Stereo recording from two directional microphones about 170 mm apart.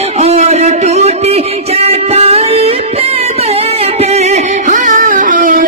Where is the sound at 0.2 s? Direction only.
35° right (ahead or behind).